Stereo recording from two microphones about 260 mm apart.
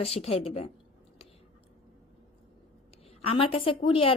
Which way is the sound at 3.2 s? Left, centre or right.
Left.